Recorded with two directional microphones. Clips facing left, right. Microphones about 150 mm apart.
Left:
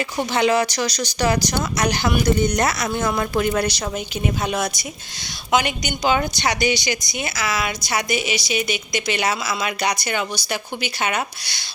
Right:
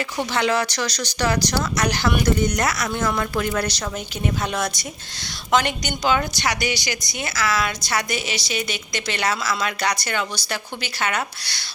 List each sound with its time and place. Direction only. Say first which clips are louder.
0.2 s a woman's voice: left 3 dB; 15° left (ahead or behind)